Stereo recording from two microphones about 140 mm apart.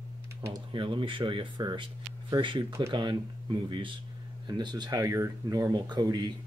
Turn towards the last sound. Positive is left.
turn(degrees=-30)  # may be behind; listen again after turning